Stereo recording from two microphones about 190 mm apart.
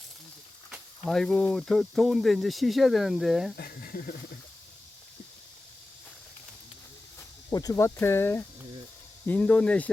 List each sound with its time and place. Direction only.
0.7 s speech: centre (ahead or behind)
3.6 s speech: 50° left (ahead or behind)
7.5 s speech: 20° left (ahead or behind)